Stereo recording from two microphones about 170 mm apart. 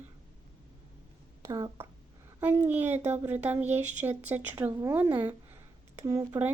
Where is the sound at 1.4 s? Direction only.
20° right (ahead or behind).